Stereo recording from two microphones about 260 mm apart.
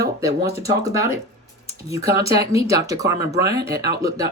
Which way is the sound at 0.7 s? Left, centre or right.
Centre.